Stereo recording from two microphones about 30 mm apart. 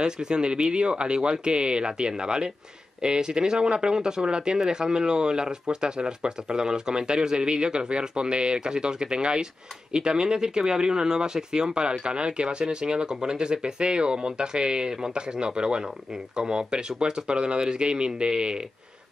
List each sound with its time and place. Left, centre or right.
0.0 s speech: right